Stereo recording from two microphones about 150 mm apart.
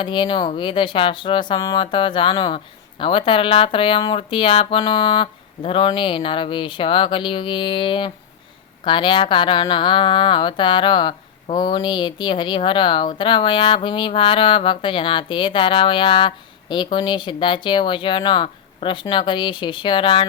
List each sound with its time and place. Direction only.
0.0 s speech: 30° left (ahead or behind)